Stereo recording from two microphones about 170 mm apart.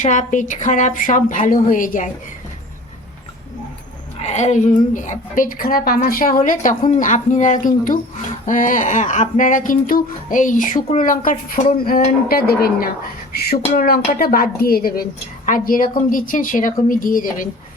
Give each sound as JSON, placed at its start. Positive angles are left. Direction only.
{"t": 0.0, "sound": "a woman's voice", "side_deg": 45}
{"t": 4.2, "sound": "a woman's voice", "side_deg": 40}